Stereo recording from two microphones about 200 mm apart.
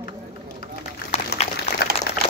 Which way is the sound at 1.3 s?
55° left (ahead or behind).